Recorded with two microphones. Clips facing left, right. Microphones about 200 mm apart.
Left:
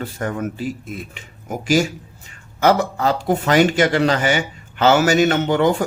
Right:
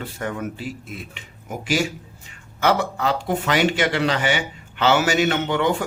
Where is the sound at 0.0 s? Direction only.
45° left (ahead or behind).